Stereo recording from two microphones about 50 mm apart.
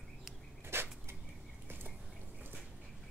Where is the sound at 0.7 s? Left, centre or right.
Right.